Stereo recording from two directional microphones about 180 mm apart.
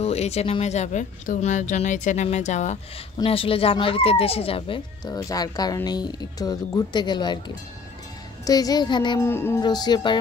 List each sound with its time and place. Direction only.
0.0 s speech: 35° left (ahead or behind)
9.2 s music: 15° left (ahead or behind)
9.6 s speech: 25° left (ahead or behind)